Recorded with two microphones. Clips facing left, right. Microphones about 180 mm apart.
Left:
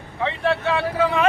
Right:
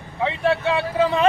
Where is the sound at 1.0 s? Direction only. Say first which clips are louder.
Right 2 dB; 30° right (ahead or behind).